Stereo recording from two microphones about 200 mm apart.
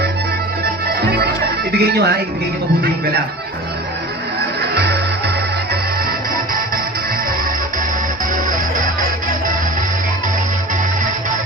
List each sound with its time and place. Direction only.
0.9 s music: 55° right (ahead or behind)
1.8 s speech: 55° right (ahead or behind)
4.7 s music: 55° right (ahead or behind)